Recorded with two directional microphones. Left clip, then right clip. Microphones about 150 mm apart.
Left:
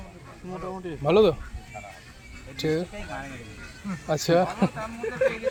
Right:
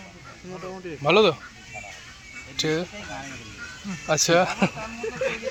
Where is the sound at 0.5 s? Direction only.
30° left (ahead or behind).